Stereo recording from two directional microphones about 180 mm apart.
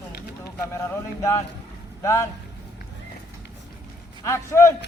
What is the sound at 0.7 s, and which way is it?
Speech, 15° left (ahead or behind).